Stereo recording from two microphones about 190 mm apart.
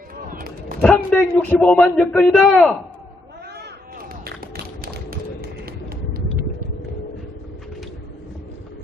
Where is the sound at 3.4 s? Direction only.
60° right (ahead or behind).